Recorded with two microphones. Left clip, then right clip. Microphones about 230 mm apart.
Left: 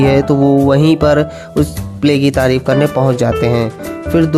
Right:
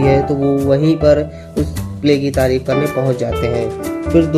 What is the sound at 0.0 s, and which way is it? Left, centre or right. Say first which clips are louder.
Speech: left 3 dB; left.